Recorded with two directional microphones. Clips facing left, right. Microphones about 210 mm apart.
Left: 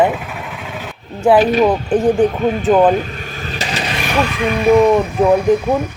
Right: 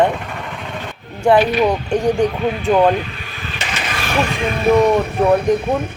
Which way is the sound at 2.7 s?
45° left (ahead or behind).